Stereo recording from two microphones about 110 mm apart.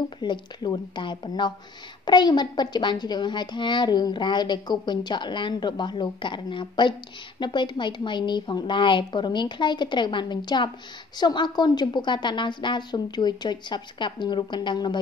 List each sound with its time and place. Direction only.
0.2 s a woman's voice: 40° left (ahead or behind)